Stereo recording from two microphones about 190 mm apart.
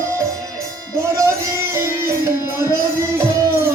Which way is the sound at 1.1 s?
15° right (ahead or behind).